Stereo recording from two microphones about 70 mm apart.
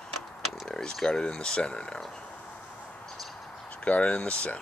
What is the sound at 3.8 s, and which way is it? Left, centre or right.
Speech, centre.